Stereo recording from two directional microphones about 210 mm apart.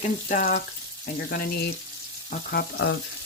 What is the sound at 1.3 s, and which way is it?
Speech, 50° left (ahead or behind).